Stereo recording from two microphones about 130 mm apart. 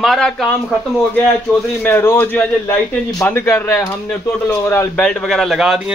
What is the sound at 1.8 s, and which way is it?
Speech, 20° left (ahead or behind).